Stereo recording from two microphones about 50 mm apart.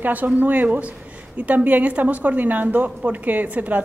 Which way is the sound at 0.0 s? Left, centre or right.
Right.